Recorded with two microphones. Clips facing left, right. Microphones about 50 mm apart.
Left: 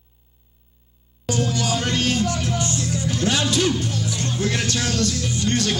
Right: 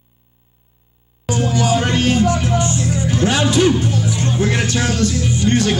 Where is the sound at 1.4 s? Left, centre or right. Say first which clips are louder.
Right 7 dB; centre.